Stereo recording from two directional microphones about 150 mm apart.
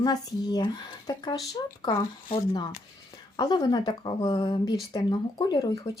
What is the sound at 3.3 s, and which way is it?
Speech, 30° left (ahead or behind).